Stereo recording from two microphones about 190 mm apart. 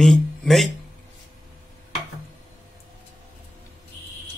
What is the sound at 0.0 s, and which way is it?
Speech, centre (ahead or behind).